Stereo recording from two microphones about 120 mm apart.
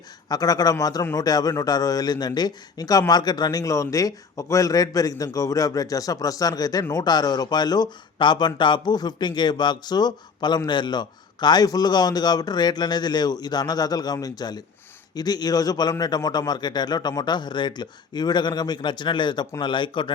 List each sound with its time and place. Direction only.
0.3 s a man's voice: 30° left (ahead or behind)